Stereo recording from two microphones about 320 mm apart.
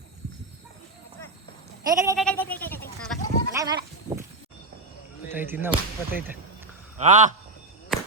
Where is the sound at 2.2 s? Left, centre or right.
Centre.